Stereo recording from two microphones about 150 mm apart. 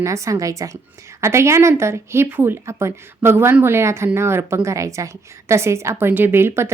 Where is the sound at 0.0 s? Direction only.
20° right (ahead or behind).